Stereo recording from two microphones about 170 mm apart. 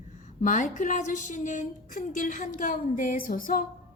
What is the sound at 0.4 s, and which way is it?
A woman's voice, 50° left (ahead or behind).